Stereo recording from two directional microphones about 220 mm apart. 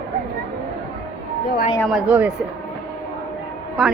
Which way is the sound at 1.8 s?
5° right (ahead or behind).